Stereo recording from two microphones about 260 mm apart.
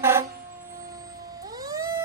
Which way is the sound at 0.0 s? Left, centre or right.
Centre.